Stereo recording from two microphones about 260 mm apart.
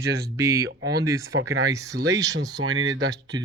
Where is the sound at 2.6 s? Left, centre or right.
Right.